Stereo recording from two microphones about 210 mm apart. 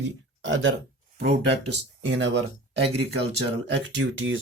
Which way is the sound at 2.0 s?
60° right (ahead or behind).